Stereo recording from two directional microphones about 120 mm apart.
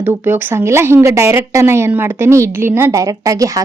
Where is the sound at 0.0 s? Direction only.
20° right (ahead or behind).